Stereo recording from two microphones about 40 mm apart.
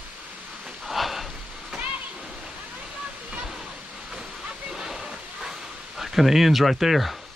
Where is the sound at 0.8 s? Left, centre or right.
Centre.